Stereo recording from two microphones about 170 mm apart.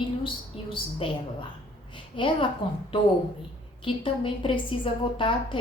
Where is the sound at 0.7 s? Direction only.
30° left (ahead or behind).